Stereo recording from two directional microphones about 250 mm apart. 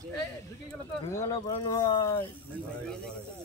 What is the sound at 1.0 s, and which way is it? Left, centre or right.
Speech, centre.